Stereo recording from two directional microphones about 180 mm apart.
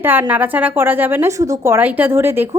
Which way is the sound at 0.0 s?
10° right (ahead or behind).